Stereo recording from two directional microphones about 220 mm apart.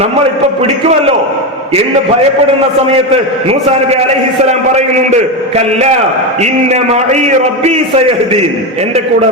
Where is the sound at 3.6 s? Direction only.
30° right (ahead or behind).